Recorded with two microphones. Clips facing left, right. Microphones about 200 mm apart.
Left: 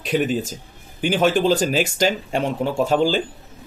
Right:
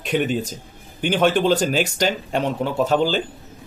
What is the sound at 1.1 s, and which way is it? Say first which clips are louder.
Speech: even; 5° left (ahead or behind).